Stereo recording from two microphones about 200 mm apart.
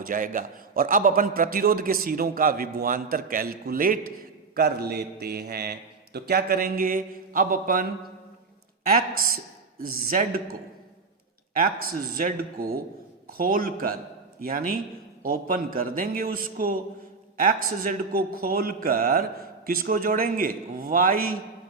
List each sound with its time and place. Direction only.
0.0 s a man's voice: 40° right (ahead or behind)
8.9 s a man's voice: 45° right (ahead or behind)
12.1 s a man's voice: 45° right (ahead or behind)